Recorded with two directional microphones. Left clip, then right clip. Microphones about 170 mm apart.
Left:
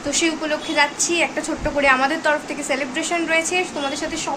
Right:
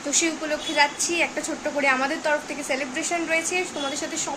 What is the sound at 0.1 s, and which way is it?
A woman's voice, 10° right (ahead or behind).